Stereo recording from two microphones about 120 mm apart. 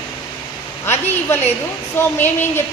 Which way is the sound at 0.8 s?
20° left (ahead or behind).